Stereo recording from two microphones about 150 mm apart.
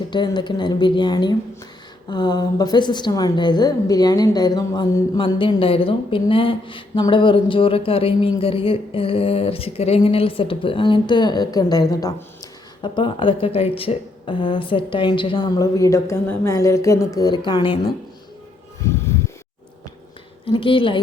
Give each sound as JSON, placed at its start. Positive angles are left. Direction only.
{"t": 0.1, "sound": "a woman's voice", "side_deg": 30}
{"t": 5.4, "sound": "a woman's voice", "side_deg": 35}
{"t": 18.9, "sound": "a sound", "side_deg": 20}
{"t": 20.4, "sound": "a woman's voice", "side_deg": 35}